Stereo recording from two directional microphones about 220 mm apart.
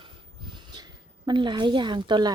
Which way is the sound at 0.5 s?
20° right (ahead or behind).